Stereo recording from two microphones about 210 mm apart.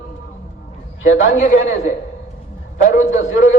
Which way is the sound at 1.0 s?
35° left (ahead or behind).